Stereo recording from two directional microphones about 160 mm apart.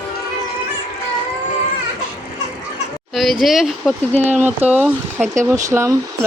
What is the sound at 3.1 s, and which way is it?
Speech, centre (ahead or behind).